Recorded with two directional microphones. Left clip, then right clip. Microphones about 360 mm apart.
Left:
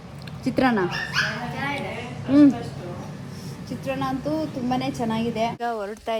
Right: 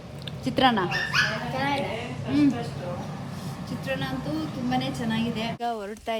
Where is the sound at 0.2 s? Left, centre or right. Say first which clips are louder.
Even; centre.